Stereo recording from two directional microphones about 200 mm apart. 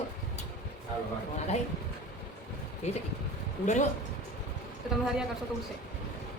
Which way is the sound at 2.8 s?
35° left (ahead or behind).